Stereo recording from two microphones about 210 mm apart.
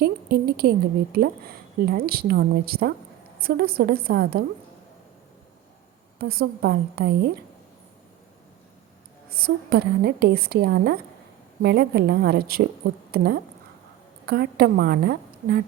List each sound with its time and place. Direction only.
0.0 s a woman's voice: 50° right (ahead or behind)
6.1 s a woman's voice: 45° right (ahead or behind)
9.3 s a woman's voice: 45° right (ahead or behind)